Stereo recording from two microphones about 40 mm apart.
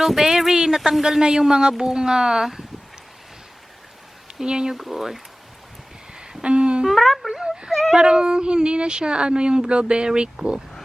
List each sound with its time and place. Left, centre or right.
0.0 s speech: centre
4.4 s speech: centre
4.8 s speech: centre
6.1 s a sound: right
6.8 s speech: centre
7.4 s whimper: centre
7.7 s speech: centre
7.9 s speech: right